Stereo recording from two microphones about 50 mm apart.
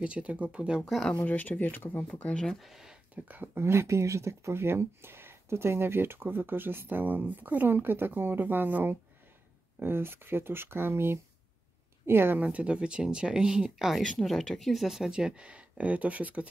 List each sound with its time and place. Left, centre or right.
0.0 s speech: right
1.2 s speech: left
2.0 s speech: left
2.3 s speech: centre
2.6 s speech: centre
3.5 s speech: right
9.8 s speech: right
12.5 s speech: right; by 14.0 s centre
14.2 s speech: centre; by 16.4 s right